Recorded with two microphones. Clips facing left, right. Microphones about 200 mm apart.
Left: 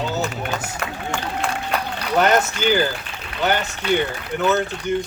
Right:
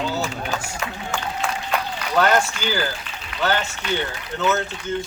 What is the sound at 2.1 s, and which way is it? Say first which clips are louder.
Speech: left 1 dB; 20° left (ahead or behind).